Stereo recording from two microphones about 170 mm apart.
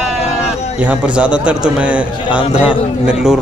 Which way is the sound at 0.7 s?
5° right (ahead or behind).